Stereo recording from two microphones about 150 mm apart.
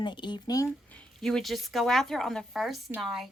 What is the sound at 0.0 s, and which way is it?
Speech, 30° left (ahead or behind).